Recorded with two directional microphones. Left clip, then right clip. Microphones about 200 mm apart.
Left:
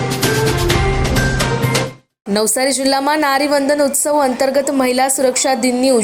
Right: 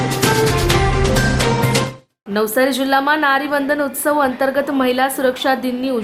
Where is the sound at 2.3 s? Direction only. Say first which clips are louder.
Even; 25° left (ahead or behind).